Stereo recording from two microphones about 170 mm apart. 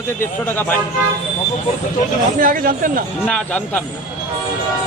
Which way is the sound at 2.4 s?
55° right (ahead or behind).